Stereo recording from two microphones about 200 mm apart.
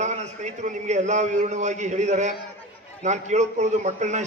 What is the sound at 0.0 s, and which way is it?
A man's voice, 35° right (ahead or behind).